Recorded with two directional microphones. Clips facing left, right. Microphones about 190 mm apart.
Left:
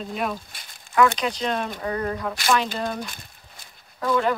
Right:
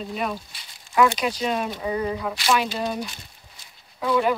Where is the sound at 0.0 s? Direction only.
Centre (ahead or behind).